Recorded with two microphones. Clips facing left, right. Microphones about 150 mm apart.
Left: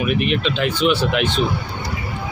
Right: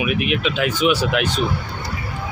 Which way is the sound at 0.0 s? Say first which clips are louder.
Left 1 dB; 5° right (ahead or behind).